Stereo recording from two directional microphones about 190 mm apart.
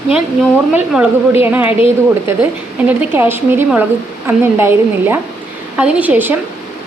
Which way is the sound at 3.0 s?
10° right (ahead or behind).